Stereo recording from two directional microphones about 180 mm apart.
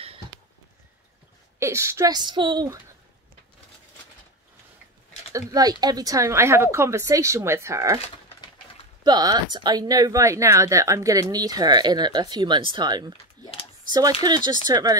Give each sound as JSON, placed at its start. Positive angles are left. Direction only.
{"t": 1.6, "sound": "speech", "side_deg": -15}
{"t": 5.3, "sound": "speech", "side_deg": -20}
{"t": 9.0, "sound": "speech", "side_deg": -20}
{"t": 14.2, "sound": "speech", "side_deg": -25}